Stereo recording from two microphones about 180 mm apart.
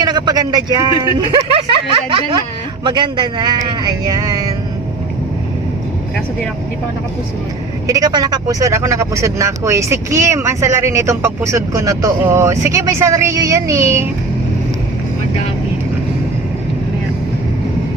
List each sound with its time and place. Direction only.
0.0 s speech: 25° right (ahead or behind)
7.9 s speech: 20° right (ahead or behind)